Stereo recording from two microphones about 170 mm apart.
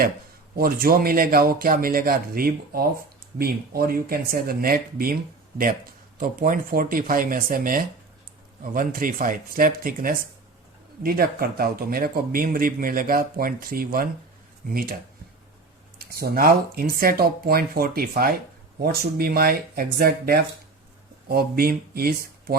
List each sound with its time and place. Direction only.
0.5 s a man's voice: 60° right (ahead or behind)
6.1 s a man's voice: 55° right (ahead or behind)
16.0 s a man's voice: 60° right (ahead or behind)